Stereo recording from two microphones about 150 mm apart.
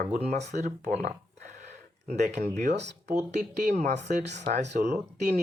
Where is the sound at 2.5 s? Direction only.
55° right (ahead or behind).